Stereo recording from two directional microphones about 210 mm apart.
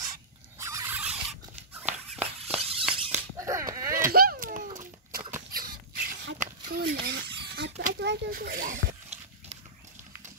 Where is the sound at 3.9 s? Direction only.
45° right (ahead or behind).